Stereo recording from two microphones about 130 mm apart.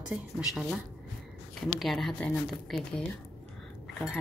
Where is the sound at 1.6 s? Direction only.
Centre (ahead or behind).